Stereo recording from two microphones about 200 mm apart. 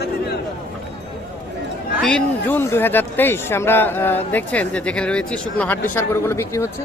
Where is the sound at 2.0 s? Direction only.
5° left (ahead or behind).